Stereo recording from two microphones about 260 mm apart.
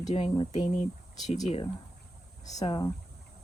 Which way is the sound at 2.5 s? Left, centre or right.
Centre.